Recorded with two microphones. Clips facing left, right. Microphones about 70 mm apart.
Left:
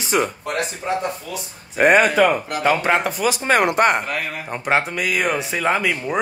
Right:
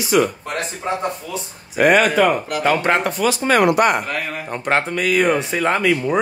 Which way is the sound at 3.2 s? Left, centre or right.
Left.